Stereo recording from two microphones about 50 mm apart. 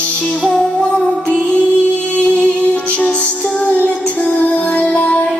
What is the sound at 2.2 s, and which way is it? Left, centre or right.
Music, left.